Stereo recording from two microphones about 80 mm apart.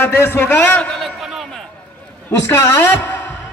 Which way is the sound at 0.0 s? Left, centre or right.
Left.